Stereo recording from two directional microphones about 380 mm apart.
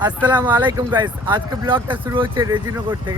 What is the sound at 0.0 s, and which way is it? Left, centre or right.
Speech, centre.